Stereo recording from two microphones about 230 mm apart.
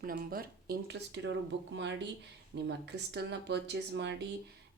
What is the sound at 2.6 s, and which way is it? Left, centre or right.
A woman's voice, right.